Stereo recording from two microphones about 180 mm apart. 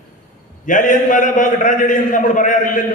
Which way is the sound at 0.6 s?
45° left (ahead or behind).